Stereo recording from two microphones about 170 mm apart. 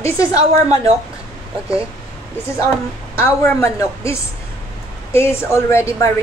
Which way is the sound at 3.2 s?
15° left (ahead or behind).